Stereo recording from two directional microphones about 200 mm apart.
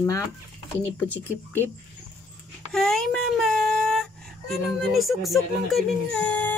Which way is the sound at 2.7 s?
Centre (ahead or behind).